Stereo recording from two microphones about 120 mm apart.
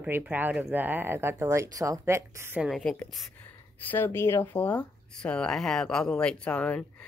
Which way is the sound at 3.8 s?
15° left (ahead or behind).